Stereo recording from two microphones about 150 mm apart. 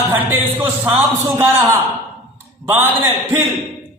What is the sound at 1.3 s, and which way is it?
A man's voice, 15° right (ahead or behind).